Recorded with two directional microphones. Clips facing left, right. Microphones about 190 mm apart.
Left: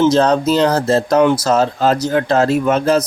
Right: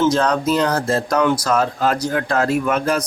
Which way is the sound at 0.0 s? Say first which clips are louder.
Left 4 dB; 25° left (ahead or behind).